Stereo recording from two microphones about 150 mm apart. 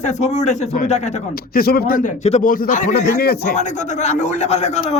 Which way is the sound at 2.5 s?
60° left (ahead or behind).